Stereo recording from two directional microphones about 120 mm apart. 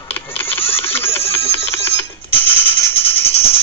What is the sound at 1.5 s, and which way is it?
Music, 20° left (ahead or behind).